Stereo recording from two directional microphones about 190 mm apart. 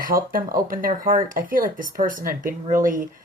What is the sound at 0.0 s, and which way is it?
Speech, 45° right (ahead or behind).